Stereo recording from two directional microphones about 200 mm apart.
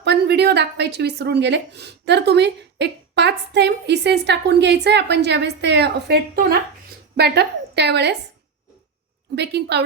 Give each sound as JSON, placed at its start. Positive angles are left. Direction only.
{"t": 0.0, "sound": "a woman's voice", "side_deg": -55}
{"t": 9.3, "sound": "speech", "side_deg": -55}